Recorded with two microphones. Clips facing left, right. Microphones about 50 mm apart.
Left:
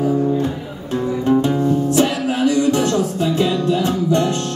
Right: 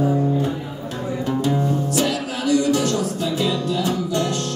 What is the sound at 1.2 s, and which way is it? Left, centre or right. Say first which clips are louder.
Music: left 4 dB; left.